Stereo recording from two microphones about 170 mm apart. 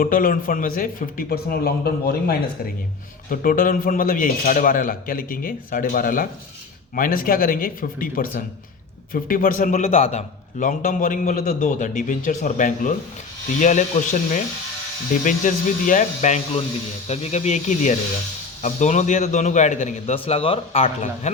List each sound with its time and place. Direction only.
0.0 s a man's voice: 55° left (ahead or behind)
3.2 s a man's voice: 55° left (ahead or behind)
20.1 s speech: 35° left (ahead or behind)
20.8 s a man's voice: 45° left (ahead or behind)